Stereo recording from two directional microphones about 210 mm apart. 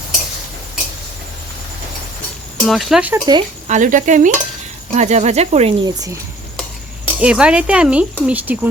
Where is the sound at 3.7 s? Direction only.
35° right (ahead or behind).